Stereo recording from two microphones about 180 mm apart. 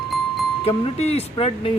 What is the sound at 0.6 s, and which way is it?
Speech, 35° left (ahead or behind).